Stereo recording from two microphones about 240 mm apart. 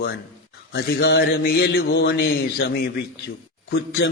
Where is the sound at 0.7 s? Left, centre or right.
Left.